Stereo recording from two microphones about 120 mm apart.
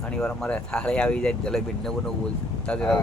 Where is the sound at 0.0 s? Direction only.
5° left (ahead or behind).